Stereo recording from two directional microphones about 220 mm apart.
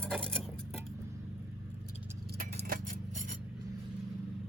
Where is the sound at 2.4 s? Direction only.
40° right (ahead or behind).